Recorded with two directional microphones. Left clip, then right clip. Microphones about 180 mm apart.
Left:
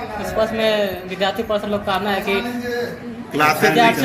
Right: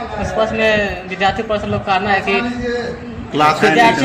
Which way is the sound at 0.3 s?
30° left (ahead or behind).